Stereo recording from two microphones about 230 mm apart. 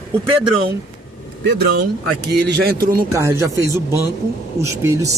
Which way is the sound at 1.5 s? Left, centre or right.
Right.